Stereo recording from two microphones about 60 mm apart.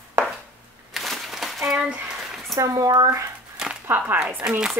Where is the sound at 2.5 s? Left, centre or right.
Right.